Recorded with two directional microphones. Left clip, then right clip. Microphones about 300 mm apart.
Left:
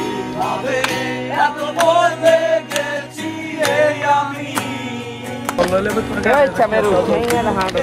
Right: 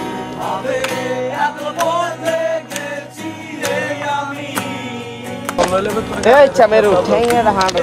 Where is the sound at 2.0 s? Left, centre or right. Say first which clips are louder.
Left 5 dB; right.